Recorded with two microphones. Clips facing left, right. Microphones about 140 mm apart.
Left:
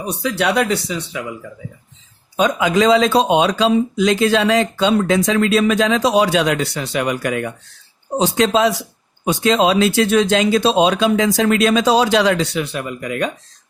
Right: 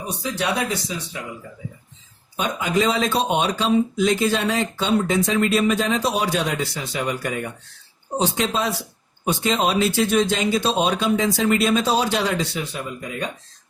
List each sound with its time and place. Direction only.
0.0 s speech: 70° left (ahead or behind)
2.3 s speech: 90° left